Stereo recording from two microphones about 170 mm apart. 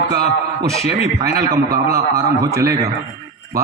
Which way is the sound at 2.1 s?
20° right (ahead or behind).